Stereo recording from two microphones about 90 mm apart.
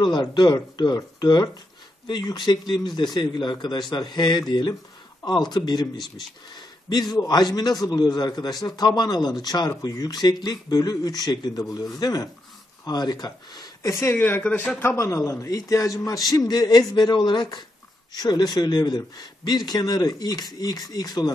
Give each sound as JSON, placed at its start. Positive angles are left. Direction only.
{"t": 0.0, "sound": "a man's voice", "side_deg": 55}
{"t": 5.9, "sound": "speech", "side_deg": 0}
{"t": 6.9, "sound": "a man's voice", "side_deg": 50}
{"t": 13.9, "sound": "speech", "side_deg": 25}
{"t": 14.8, "sound": "a man's voice", "side_deg": 30}